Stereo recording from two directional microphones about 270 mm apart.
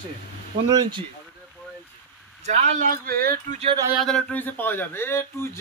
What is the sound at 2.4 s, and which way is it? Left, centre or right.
Speech, right.